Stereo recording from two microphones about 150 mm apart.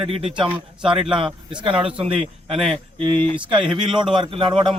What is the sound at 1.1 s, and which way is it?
Speech, 35° right (ahead or behind).